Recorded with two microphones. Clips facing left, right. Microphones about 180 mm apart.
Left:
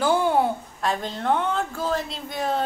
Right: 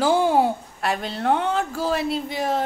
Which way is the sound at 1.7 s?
10° right (ahead or behind).